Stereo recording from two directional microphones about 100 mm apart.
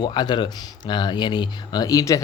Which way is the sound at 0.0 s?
50° left (ahead or behind).